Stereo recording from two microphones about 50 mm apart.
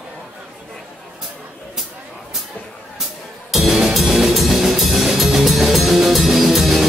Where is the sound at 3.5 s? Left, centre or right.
Centre.